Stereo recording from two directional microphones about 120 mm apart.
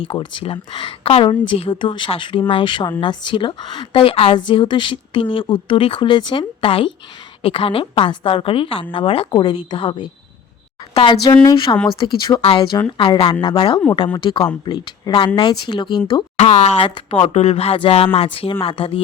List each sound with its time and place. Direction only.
0.0 s speech: 45° left (ahead or behind)
16.4 s speech: 70° left (ahead or behind)
16.8 s speech: 50° left (ahead or behind)